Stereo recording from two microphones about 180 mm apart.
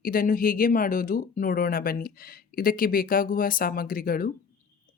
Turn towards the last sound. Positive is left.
turn(degrees=55)  # may be behind; listen again after turning